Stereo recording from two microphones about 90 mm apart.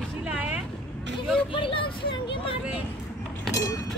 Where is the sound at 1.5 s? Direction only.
70° left (ahead or behind).